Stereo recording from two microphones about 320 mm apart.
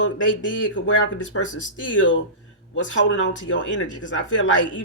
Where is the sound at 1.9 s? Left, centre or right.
Left.